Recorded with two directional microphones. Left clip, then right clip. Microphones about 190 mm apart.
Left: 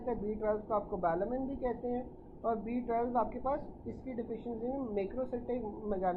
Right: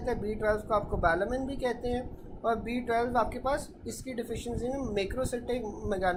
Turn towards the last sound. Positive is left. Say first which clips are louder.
# right 4 dB
turn(degrees=-25)  # may be behind; listen again after turning